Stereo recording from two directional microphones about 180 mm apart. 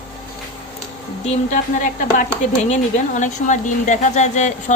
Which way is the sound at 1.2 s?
45° left (ahead or behind).